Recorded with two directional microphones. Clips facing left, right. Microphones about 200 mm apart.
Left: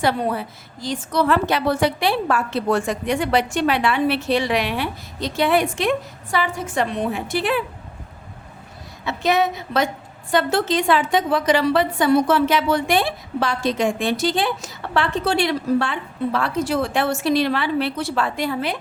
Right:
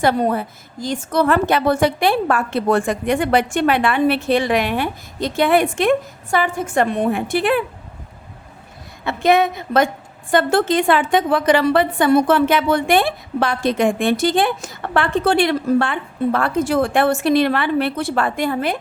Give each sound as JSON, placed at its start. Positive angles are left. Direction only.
{"t": 0.0, "sound": "a woman's voice", "side_deg": -50}
{"t": 9.0, "sound": "a woman's voice", "side_deg": -55}